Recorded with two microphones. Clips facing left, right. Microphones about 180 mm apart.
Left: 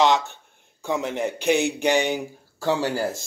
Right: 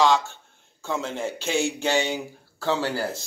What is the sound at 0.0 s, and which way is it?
Speech, 20° left (ahead or behind).